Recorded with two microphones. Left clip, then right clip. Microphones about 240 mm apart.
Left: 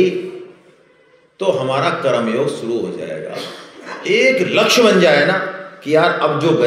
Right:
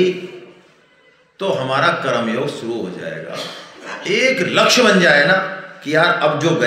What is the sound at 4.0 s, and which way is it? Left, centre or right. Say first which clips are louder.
A man's voice: left 3 dB; centre.